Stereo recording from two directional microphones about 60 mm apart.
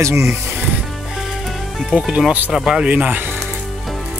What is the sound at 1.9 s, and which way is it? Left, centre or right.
Speech, centre.